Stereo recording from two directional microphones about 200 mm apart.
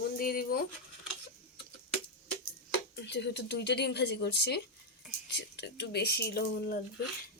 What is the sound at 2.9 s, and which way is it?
Speech, 60° left (ahead or behind).